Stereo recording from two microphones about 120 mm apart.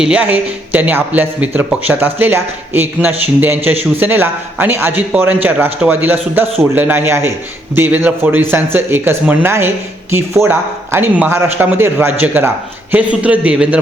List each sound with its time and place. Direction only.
0.0 s speech: 10° right (ahead or behind)